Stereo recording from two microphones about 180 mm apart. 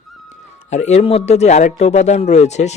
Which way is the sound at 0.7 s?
40° left (ahead or behind).